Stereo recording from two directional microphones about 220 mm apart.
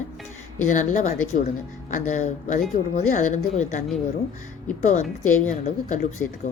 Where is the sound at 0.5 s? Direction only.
35° left (ahead or behind).